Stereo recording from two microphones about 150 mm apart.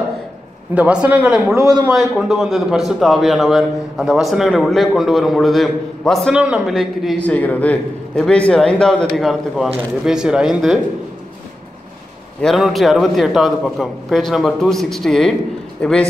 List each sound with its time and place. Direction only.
0.7 s speech: 10° right (ahead or behind)
1.6 s a man's voice: 25° right (ahead or behind)
1.9 s a man's voice: 5° right (ahead or behind)
7.2 s a man's voice: 10° left (ahead or behind)
12.4 s a man's voice: centre (ahead or behind)